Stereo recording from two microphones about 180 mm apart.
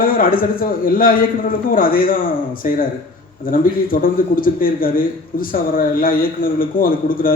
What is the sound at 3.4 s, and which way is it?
A man's voice, 50° left (ahead or behind).